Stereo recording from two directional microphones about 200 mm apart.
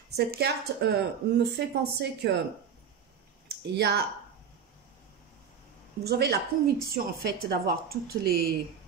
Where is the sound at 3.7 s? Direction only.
55° right (ahead or behind).